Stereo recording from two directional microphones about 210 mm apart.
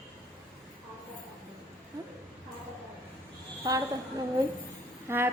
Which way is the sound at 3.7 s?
20° right (ahead or behind).